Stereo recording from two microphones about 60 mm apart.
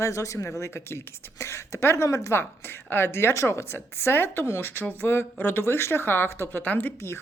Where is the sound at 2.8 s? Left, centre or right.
Left.